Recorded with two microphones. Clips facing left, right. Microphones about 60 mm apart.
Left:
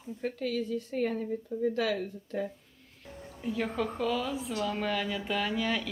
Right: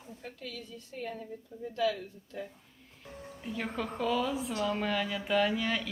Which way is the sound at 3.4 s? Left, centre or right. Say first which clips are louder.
Left 4 dB; centre.